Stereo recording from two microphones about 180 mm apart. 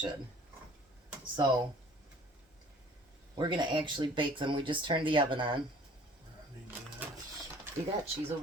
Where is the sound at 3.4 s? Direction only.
25° right (ahead or behind).